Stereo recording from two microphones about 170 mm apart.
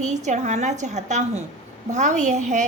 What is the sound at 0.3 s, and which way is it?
A woman's voice, 45° right (ahead or behind).